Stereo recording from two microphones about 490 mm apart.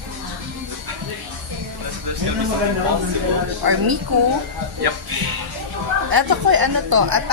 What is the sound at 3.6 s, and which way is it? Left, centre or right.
Speech, right.